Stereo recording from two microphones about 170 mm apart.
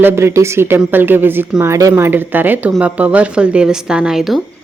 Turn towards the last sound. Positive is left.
turn(degrees=0)  # may be behind; listen again after turning